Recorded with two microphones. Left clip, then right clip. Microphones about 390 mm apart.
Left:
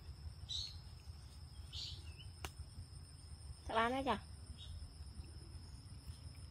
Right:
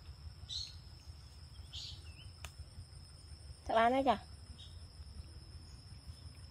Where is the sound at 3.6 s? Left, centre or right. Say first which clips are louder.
Right 7 dB; centre.